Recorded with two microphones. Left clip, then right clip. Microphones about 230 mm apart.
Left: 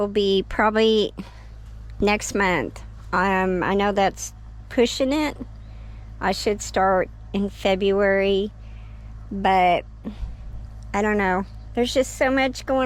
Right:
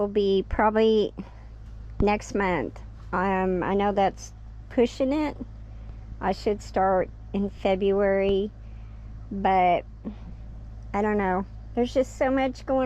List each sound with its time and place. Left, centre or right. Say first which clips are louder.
0.0 s a woman's voice: left 3 dB; centre